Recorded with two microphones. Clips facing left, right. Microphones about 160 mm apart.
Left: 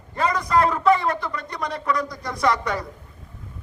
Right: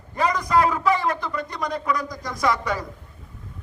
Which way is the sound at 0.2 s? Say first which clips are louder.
Even; 10° right (ahead or behind).